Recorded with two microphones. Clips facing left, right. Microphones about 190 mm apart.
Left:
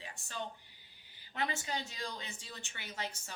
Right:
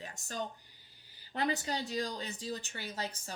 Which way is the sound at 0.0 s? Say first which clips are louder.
Right 3 dB; 40° right (ahead or behind).